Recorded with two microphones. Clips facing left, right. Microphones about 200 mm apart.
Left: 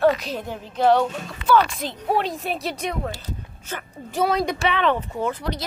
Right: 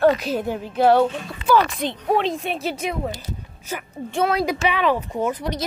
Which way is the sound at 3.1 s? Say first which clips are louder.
Right 1 dB; 10° right (ahead or behind).